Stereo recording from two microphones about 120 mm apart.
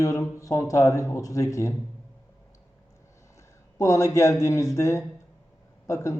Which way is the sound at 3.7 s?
25° left (ahead or behind).